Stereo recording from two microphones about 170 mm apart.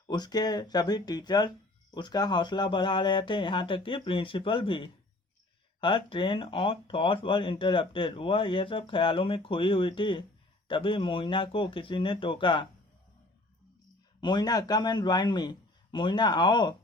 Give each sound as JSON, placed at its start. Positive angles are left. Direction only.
{"t": 0.1, "sound": "speech", "side_deg": 25}
{"t": 14.2, "sound": "speech", "side_deg": 25}